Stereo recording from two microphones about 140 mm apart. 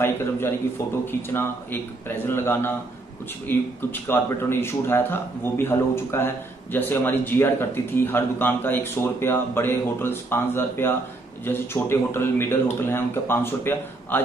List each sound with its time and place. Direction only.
0.0 s speech: 15° left (ahead or behind)